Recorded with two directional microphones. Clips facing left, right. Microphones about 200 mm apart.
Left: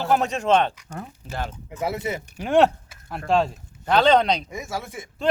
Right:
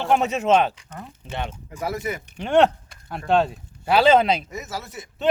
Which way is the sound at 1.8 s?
25° left (ahead or behind).